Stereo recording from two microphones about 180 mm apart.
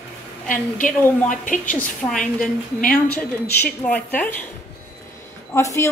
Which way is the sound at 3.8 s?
10° left (ahead or behind).